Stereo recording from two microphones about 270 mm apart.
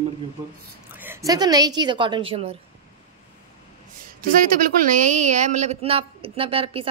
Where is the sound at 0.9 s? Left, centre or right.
Centre.